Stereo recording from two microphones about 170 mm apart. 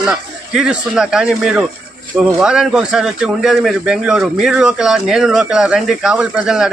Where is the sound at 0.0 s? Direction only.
5° right (ahead or behind).